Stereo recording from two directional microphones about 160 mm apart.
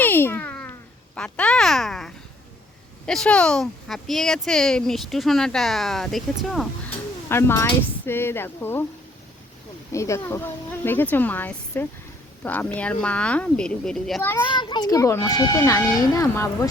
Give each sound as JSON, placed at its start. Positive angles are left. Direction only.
{"t": 0.0, "sound": "cat", "side_deg": 15}
{"t": 1.1, "sound": "speech", "side_deg": 5}
{"t": 7.3, "sound": "speech", "side_deg": 15}
{"t": 9.9, "sound": "speech", "side_deg": 20}
{"t": 14.6, "sound": "speech", "side_deg": 25}